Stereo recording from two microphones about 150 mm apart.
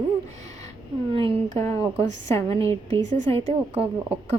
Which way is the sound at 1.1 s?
35° right (ahead or behind).